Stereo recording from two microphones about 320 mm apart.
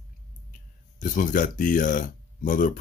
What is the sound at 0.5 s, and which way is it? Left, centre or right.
Speech, left.